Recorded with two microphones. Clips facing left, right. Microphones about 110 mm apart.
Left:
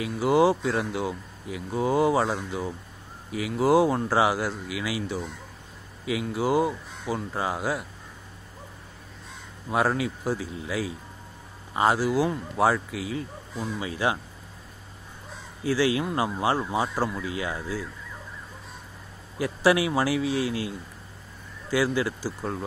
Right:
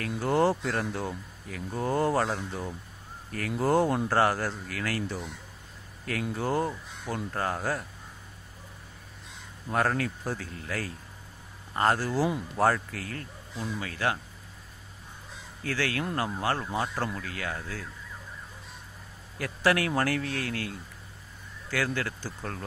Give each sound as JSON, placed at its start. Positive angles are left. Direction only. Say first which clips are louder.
{"t": 0.1, "sound": "speech", "louder": "left 4 dB", "side_deg": 0}
{"t": 6.3, "sound": "speech", "louder": "left 6 dB", "side_deg": 5}
{"t": 9.7, "sound": "speech", "louder": "left 3 dB", "side_deg": 10}
{"t": 13.7, "sound": "speech", "louder": "left 3 dB", "side_deg": 15}
{"t": 15.6, "sound": "speech", "louder": "left 7 dB", "side_deg": 15}
{"t": 19.3, "sound": "speech", "louder": "left 4 dB", "side_deg": 15}